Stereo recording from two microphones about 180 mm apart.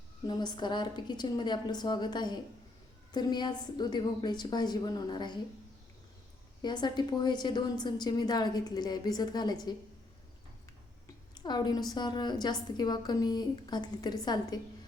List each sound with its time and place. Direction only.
0.3 s a woman's voice: 25° left (ahead or behind)
6.6 s a woman's voice: 25° left (ahead or behind)
11.3 s a woman's voice: 25° left (ahead or behind)